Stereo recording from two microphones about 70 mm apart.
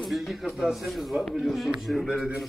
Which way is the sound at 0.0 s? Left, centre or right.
Centre.